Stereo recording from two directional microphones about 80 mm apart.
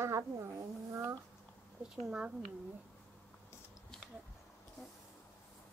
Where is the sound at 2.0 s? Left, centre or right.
Centre.